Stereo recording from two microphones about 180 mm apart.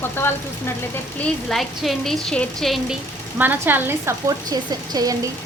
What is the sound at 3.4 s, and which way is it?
A woman's voice, 10° right (ahead or behind).